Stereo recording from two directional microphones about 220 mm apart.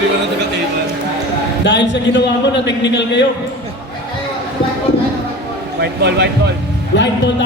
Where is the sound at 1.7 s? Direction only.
50° left (ahead or behind).